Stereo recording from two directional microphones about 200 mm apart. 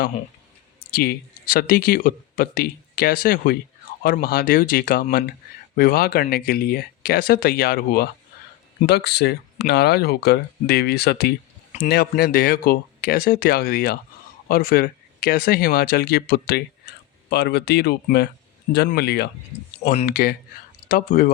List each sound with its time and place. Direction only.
0.9 s speech: 50° left (ahead or behind)